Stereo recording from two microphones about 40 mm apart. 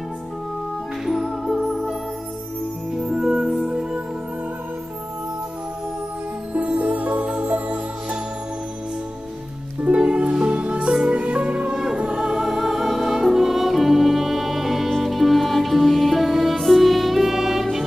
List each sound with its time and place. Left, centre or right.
1.0 s music: centre
6.5 s music: right
9.8 s music: right; by 17.6 s centre